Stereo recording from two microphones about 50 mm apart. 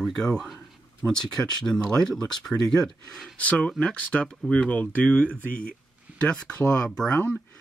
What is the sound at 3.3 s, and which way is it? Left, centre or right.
Speech, left.